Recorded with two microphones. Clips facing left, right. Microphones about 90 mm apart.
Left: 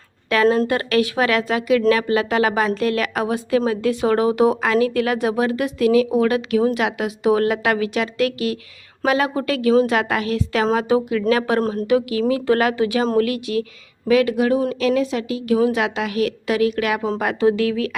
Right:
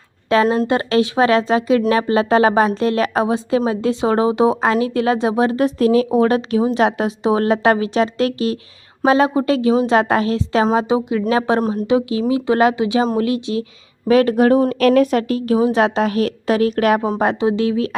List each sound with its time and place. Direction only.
0.3 s a woman's voice: 30° right (ahead or behind)
14.1 s speech: 40° right (ahead or behind)
15.5 s a woman's voice: 30° right (ahead or behind)
17.2 s a woman's voice: 25° right (ahead or behind)